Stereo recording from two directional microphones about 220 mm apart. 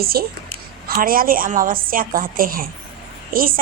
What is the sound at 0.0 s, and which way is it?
A woman's voice, 45° right (ahead or behind).